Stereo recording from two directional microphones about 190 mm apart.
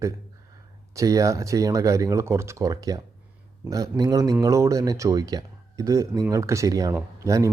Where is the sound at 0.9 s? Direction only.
15° right (ahead or behind).